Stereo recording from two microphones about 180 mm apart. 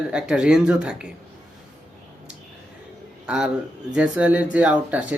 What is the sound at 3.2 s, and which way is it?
A man's voice, 5° right (ahead or behind).